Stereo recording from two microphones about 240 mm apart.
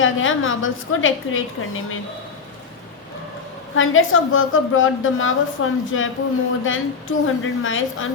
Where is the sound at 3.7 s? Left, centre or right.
Left.